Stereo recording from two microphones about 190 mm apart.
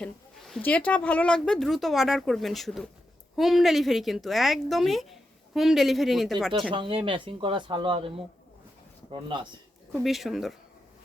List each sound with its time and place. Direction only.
0.0 s speech: 5° left (ahead or behind)
6.5 s speech: 25° right (ahead or behind)
9.9 s speech: centre (ahead or behind)